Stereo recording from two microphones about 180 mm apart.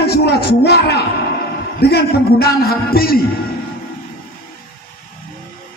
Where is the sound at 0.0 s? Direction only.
60° left (ahead or behind).